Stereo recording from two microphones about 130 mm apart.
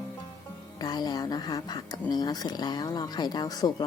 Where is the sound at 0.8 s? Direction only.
30° left (ahead or behind).